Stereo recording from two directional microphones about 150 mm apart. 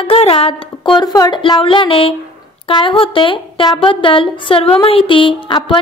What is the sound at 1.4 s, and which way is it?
A woman's voice, 35° left (ahead or behind).